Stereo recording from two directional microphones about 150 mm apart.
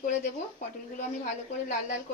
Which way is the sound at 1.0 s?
60° left (ahead or behind).